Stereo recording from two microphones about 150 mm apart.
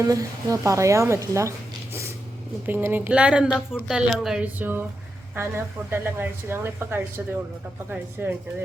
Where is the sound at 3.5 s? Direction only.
15° left (ahead or behind).